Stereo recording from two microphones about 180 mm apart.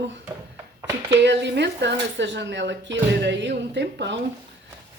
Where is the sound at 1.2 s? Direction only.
70° right (ahead or behind).